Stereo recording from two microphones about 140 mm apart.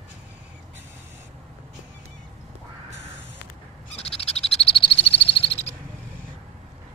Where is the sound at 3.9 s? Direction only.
45° left (ahead or behind).